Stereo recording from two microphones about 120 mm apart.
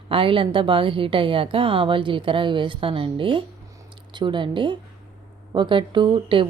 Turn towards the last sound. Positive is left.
turn(degrees=-40)  # may be behind; listen again after turning